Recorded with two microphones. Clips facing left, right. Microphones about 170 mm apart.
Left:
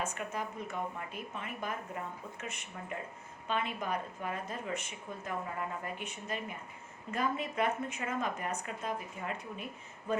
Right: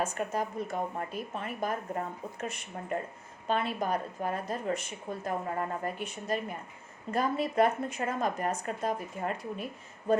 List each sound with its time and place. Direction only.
0.0 s speech: 35° right (ahead or behind)